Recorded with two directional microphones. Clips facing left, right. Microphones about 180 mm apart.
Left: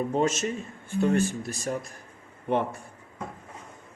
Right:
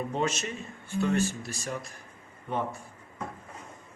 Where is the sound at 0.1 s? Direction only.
45° left (ahead or behind).